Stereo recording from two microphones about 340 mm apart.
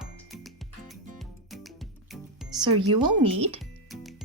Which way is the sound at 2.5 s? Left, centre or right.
Centre.